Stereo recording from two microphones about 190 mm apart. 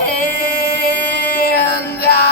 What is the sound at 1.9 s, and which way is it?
Music, 55° left (ahead or behind).